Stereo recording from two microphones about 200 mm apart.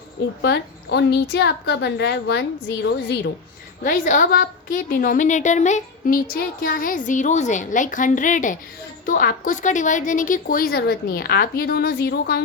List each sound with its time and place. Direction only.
0.4 s a woman's voice: 60° left (ahead or behind)
3.8 s a woman's voice: 45° left (ahead or behind)